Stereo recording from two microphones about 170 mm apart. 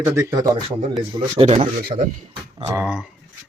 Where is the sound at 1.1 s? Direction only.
40° right (ahead or behind).